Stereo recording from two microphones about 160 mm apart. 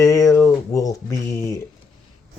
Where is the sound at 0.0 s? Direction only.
20° left (ahead or behind).